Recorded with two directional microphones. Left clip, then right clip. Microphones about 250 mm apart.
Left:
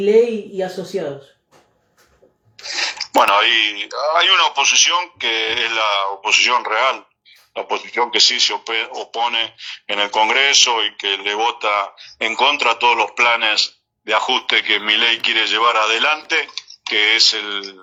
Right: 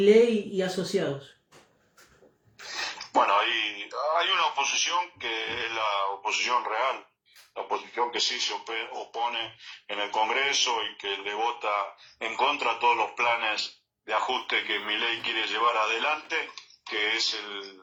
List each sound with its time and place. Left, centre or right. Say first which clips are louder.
3.0 s speech: left 9 dB; left